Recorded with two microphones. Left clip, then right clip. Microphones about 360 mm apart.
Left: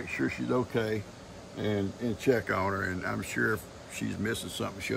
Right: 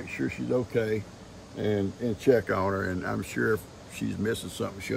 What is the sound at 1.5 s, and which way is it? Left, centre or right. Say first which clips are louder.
Speech: right 3 dB; left.